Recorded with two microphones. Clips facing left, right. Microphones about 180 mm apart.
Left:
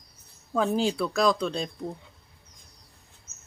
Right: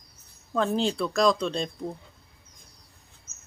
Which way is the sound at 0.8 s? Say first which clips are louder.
Even; 5° left (ahead or behind).